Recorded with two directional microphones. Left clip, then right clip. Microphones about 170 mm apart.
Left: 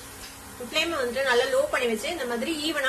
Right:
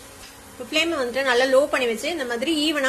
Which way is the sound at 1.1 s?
40° right (ahead or behind).